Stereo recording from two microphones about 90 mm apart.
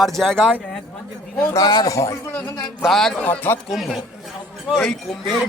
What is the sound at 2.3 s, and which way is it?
Speech, 20° left (ahead or behind).